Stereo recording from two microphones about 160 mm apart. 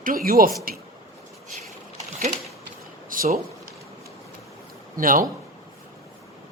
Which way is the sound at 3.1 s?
60° right (ahead or behind).